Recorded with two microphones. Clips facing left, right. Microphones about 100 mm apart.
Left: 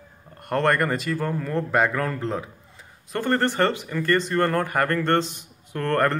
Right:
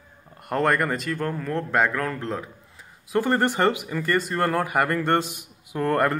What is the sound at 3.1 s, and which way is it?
Speech, 10° right (ahead or behind).